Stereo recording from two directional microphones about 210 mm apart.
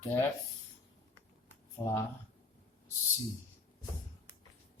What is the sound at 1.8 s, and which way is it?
Speech, 20° left (ahead or behind).